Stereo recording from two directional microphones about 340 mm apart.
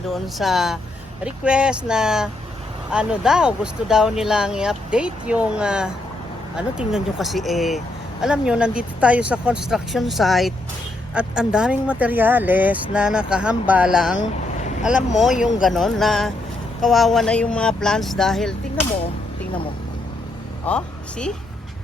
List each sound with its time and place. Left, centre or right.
0.1 s speech: centre
15.4 s speech: left
15.6 s speech: centre
20.7 s speech: centre